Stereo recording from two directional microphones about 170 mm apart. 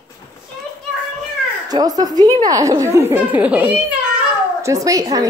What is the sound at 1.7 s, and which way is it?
A woman's voice, 20° right (ahead or behind).